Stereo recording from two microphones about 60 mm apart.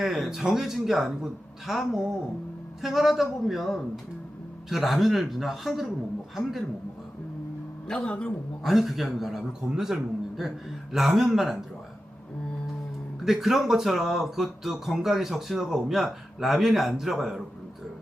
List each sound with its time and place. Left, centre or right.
0.0 s speech: centre
7.9 s speech: centre
8.6 s speech: centre
13.2 s speech: centre